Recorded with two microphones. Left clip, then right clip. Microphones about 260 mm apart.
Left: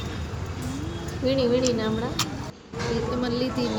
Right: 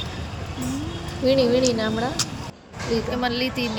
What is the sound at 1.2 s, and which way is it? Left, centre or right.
Speech, centre.